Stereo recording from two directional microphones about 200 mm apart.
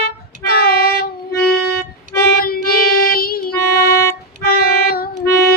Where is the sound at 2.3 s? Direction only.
50° left (ahead or behind).